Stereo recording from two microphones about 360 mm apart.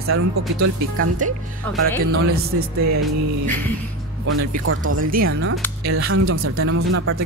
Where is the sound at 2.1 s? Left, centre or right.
Right.